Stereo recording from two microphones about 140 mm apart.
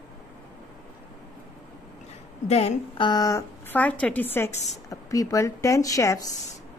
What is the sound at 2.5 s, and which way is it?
Speech, 50° left (ahead or behind).